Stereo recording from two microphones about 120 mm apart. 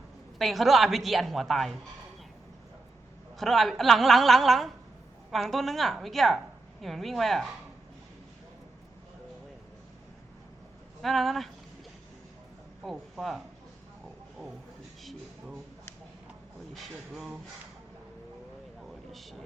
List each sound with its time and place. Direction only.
0.3 s a woman's voice: centre (ahead or behind)
3.3 s a woman's voice: centre (ahead or behind)
11.0 s a woman's voice: centre (ahead or behind)
12.8 s speech: centre (ahead or behind)
16.7 s a woman's voice: centre (ahead or behind)
18.8 s vehicle: centre (ahead or behind)